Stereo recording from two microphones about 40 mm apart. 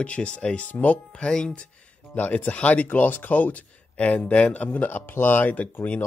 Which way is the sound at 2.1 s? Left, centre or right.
Left.